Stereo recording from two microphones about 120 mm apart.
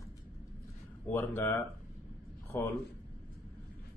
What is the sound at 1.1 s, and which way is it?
Speech, 20° left (ahead or behind).